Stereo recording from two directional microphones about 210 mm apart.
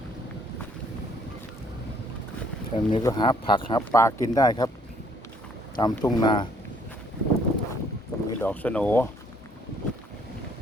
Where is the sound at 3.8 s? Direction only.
10° left (ahead or behind).